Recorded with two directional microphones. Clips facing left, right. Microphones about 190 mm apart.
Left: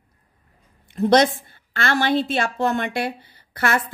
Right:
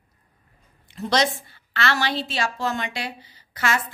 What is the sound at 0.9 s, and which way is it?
A woman's voice, 55° left (ahead or behind).